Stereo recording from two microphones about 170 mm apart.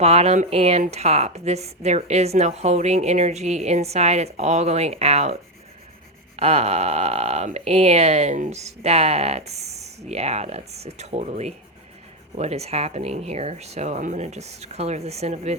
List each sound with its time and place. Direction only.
0.0 s speech: 40° right (ahead or behind)